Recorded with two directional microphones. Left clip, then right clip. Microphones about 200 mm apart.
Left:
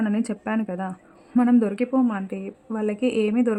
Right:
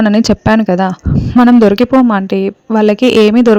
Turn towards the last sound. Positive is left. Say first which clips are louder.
# right 15 dB
turn(degrees=-45)  # may be behind; listen again after turning